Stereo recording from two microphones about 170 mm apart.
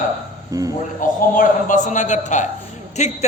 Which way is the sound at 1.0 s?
50° left (ahead or behind).